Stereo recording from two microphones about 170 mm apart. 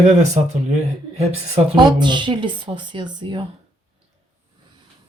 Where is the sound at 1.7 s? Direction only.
25° right (ahead or behind).